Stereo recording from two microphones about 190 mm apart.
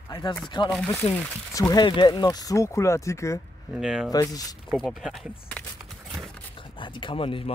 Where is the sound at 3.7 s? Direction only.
Centre (ahead or behind).